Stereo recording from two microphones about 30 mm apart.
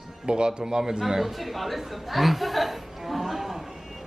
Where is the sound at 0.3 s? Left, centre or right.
Right.